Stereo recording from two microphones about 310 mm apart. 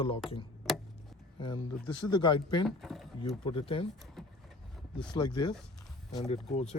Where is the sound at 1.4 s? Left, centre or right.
Centre.